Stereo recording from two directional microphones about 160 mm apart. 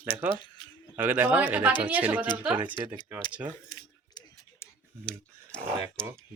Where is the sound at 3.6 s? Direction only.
20° left (ahead or behind).